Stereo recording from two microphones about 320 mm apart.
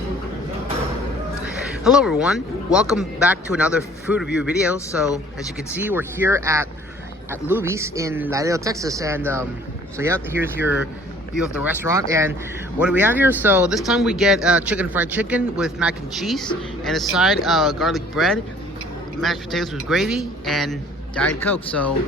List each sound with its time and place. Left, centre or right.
1.8 s speech: centre